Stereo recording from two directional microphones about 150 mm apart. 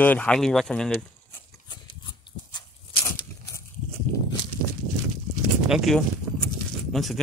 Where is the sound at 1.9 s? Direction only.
35° left (ahead or behind).